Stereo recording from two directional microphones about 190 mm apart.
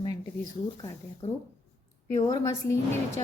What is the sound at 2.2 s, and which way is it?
Speech, 15° left (ahead or behind).